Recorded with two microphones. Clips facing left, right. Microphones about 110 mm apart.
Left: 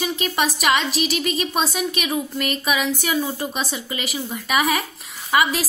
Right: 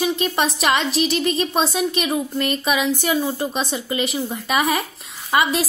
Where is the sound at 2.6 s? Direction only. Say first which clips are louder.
Right 1 dB; 30° right (ahead or behind).